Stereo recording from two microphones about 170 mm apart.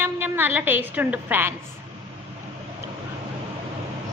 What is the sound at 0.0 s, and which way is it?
A woman's voice, 10° right (ahead or behind).